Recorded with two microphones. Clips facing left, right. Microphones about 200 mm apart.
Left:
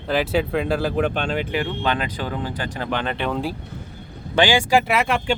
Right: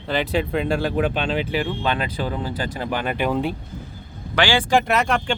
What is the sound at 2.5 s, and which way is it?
Speech, 10° right (ahead or behind).